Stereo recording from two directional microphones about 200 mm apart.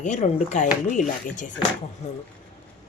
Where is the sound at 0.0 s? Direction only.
35° left (ahead or behind).